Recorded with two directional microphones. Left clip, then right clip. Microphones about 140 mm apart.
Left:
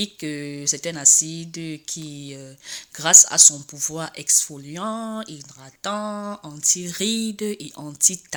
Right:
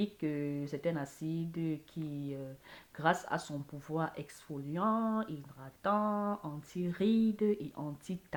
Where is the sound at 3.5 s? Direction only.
45° left (ahead or behind).